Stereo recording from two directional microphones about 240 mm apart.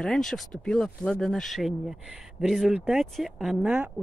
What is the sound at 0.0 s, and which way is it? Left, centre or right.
Speech, centre.